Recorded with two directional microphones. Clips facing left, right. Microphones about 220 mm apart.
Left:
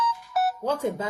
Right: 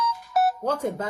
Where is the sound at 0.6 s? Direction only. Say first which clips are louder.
Even; 10° left (ahead or behind).